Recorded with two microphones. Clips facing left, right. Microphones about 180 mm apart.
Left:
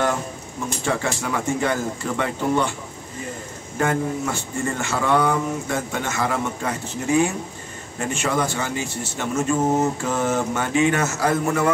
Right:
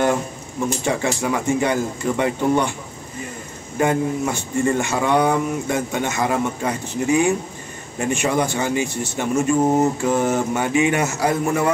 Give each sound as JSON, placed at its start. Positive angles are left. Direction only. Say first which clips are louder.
{"t": 0.8, "sound": "a man's voice", "louder": "right 1 dB", "side_deg": -15}
{"t": 3.7, "sound": "a man's voice", "louder": "right 3 dB", "side_deg": -15}